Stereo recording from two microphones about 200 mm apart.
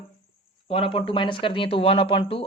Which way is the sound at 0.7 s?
25° left (ahead or behind).